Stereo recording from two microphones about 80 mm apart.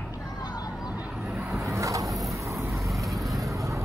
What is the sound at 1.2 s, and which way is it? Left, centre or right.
Vehicle, centre.